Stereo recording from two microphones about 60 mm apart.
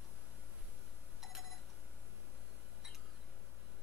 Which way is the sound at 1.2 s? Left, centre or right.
Centre.